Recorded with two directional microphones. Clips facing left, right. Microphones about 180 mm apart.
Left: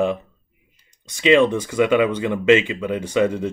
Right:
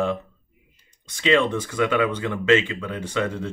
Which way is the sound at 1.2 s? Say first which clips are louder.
Left 5 dB; 15° left (ahead or behind).